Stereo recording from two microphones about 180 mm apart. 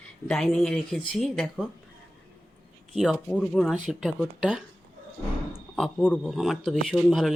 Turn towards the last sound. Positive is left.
turn(degrees=0)  # may be behind; listen again after turning